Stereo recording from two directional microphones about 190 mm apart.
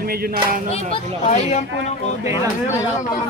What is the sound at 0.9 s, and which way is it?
Speech, 35° left (ahead or behind).